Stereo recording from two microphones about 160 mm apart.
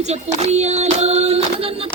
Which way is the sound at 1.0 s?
40° right (ahead or behind).